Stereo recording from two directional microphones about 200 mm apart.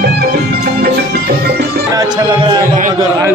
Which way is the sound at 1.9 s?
20° right (ahead or behind).